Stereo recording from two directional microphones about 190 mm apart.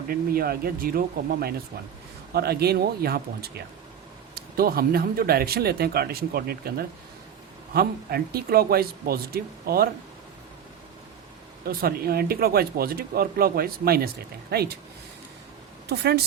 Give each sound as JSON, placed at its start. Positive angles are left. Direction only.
{"t": 0.1, "sound": "speech", "side_deg": -50}
{"t": 11.6, "sound": "speech", "side_deg": -55}
{"t": 15.9, "sound": "speech", "side_deg": -60}